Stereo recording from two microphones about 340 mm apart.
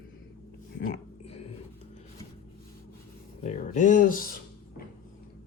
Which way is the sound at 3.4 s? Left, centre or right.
Left.